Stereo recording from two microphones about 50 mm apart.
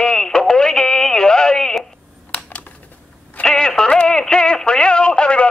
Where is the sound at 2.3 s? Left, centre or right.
Left.